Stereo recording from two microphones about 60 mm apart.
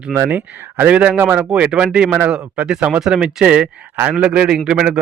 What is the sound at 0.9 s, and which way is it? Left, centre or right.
Speech, right.